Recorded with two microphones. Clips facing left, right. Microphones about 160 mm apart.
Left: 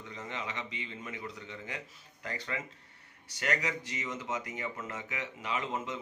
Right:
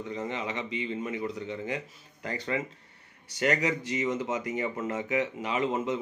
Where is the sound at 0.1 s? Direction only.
20° right (ahead or behind).